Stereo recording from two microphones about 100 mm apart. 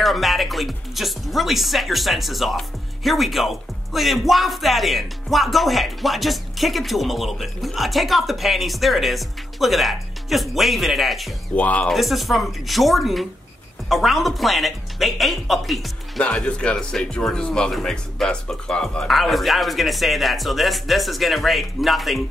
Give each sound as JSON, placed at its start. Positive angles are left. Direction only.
{"t": 0.0, "sound": "speech", "side_deg": 0}
{"t": 11.5, "sound": "speech", "side_deg": 15}
{"t": 11.9, "sound": "speech", "side_deg": 0}
{"t": 16.2, "sound": "speech", "side_deg": 10}